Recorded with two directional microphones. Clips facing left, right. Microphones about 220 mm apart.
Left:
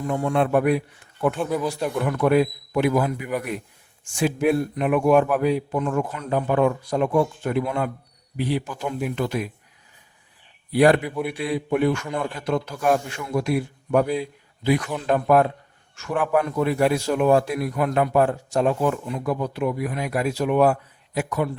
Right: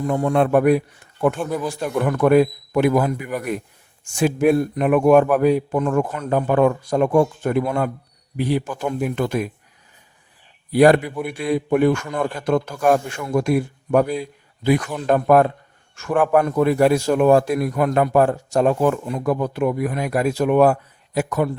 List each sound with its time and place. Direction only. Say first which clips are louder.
0.1 s speech: right 3 dB; 40° right (ahead or behind)
1.4 s a man's voice: even; 5° left (ahead or behind)
1.7 s speech: right 3 dB; 50° right (ahead or behind)
10.7 s speech: right 3 dB; 45° right (ahead or behind)
11.0 s a man's voice: even; centre (ahead or behind)
11.3 s speech: right 6 dB; 45° right (ahead or behind)